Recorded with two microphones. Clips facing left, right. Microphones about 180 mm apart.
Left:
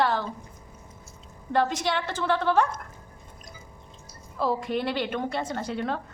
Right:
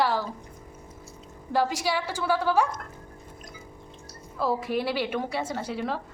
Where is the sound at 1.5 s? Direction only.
5° right (ahead or behind).